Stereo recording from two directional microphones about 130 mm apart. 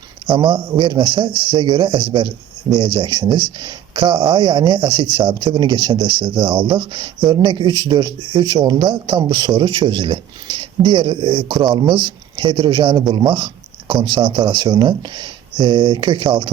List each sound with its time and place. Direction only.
0.3 s speech: 35° right (ahead or behind)